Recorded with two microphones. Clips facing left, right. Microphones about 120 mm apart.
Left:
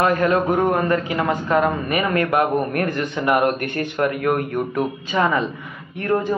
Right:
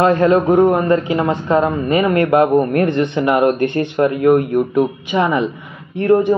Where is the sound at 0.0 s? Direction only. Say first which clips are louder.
Right 5 dB; 25° right (ahead or behind).